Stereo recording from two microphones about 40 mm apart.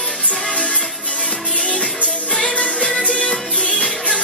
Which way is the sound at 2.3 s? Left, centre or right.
Left.